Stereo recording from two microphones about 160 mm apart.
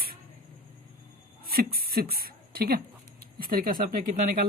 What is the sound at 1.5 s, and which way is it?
Speech, 70° right (ahead or behind).